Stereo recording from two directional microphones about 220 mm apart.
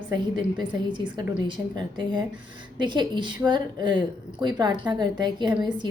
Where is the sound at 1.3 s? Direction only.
20° right (ahead or behind).